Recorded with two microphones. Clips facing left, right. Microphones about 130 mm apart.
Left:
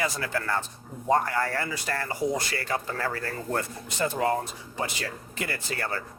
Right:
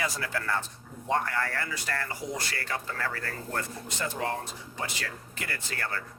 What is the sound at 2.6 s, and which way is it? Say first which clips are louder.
Speech: left 3 dB; 30° left (ahead or behind).